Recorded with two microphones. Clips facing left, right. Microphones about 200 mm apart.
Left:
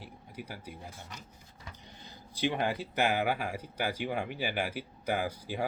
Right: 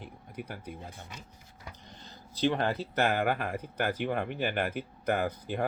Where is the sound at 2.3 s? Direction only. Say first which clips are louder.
Right 3 dB; 10° left (ahead or behind).